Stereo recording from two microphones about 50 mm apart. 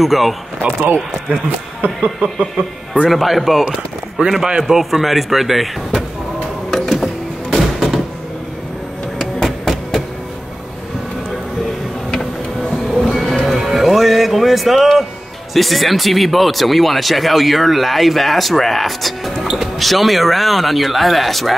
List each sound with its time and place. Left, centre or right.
0.0 s speech: centre
0.6 s speech: right
3.1 s speech: centre
6.7 s music: centre
9.2 s a sound: centre
12.7 s music: centre
15.5 s speech: centre